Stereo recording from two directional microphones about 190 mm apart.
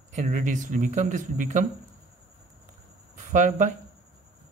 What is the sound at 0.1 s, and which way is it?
Speech, 40° right (ahead or behind).